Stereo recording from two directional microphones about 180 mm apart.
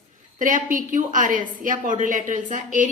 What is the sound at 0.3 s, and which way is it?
A woman's voice, 45° right (ahead or behind).